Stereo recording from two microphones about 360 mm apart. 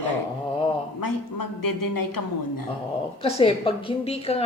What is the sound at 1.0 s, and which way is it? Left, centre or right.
A woman's voice, left.